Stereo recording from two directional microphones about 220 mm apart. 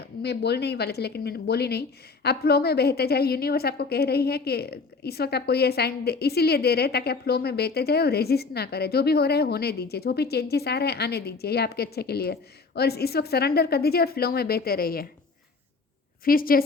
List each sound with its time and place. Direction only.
0.0 s a woman's voice: 50° left (ahead or behind)
16.2 s a woman's voice: 40° left (ahead or behind)